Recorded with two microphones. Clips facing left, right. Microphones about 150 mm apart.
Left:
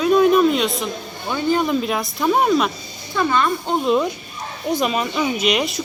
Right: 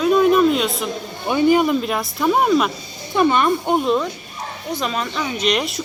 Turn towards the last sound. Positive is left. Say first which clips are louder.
# left 1 dB
turn(degrees=0)  # may be behind; listen again after turning